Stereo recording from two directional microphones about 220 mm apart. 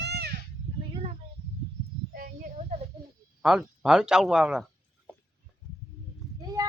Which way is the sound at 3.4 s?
5° right (ahead or behind).